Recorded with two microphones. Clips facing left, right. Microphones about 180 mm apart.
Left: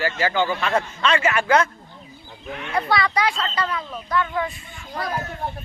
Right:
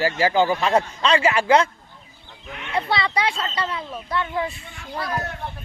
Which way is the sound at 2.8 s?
25° right (ahead or behind).